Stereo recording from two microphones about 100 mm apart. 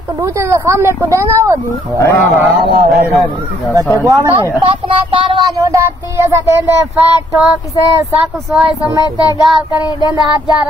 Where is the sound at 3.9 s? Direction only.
30° right (ahead or behind).